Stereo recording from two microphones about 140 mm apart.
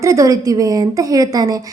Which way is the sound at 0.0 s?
25° right (ahead or behind).